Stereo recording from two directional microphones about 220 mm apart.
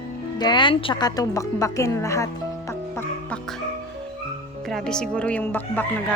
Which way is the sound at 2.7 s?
10° left (ahead or behind).